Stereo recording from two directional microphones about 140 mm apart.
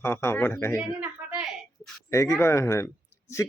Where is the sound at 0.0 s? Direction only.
20° left (ahead or behind).